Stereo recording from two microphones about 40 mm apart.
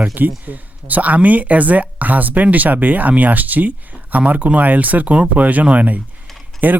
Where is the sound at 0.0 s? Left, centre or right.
Right.